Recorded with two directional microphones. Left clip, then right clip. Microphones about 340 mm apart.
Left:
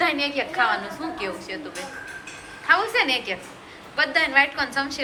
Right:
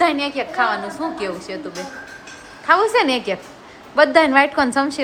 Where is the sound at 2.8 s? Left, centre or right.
Right.